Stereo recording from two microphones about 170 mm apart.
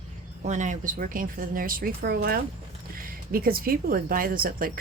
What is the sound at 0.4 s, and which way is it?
Speech, 45° right (ahead or behind).